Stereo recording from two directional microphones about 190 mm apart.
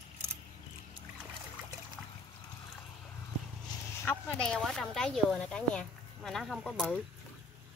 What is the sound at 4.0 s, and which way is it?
Speech, 5° left (ahead or behind).